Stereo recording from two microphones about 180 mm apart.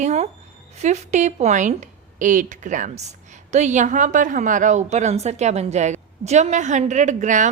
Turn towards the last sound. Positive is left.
turn(degrees=-45)  # may be behind; listen again after turning